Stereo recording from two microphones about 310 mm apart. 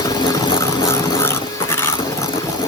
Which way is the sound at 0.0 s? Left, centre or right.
Centre.